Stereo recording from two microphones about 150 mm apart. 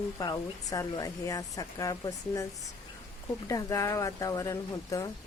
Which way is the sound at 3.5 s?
20° left (ahead or behind).